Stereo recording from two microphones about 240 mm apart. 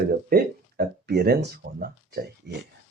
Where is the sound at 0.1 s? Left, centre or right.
Right.